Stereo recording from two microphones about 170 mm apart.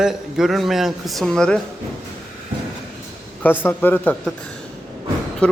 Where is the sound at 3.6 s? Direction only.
10° left (ahead or behind).